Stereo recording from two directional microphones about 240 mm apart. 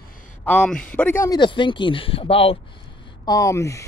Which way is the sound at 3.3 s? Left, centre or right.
Centre.